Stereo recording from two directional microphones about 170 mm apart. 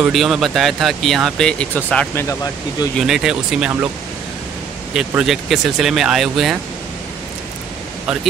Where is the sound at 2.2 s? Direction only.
20° left (ahead or behind).